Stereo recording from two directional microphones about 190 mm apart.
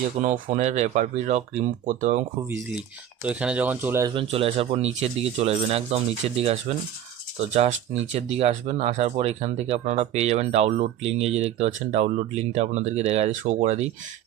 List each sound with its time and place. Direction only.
0.2 s speech: 40° right (ahead or behind)
3.2 s speech: 5° right (ahead or behind)
4.1 s speech: 30° right (ahead or behind)